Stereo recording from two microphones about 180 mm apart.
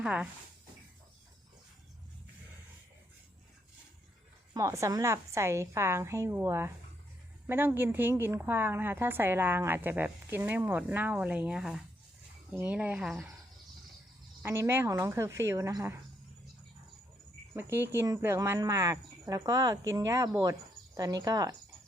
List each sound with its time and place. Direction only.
0.0 s a woman's voice: 5° right (ahead or behind)
4.5 s a woman's voice: 15° right (ahead or behind)
14.4 s a woman's voice: 15° right (ahead or behind)
17.5 s speech: 10° right (ahead or behind)